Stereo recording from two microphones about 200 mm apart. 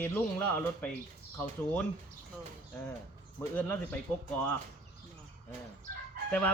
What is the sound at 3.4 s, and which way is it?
Speech, 10° left (ahead or behind).